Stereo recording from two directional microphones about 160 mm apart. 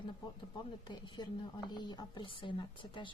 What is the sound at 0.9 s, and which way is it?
A woman's voice, 30° left (ahead or behind).